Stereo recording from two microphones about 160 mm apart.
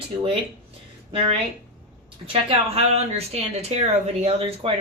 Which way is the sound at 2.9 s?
40° right (ahead or behind).